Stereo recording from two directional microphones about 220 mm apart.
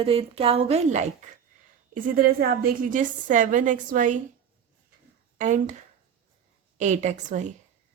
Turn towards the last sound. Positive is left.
turn(degrees=-35)  # may be behind; listen again after turning